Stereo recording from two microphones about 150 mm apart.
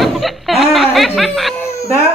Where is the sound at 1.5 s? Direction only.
20° left (ahead or behind).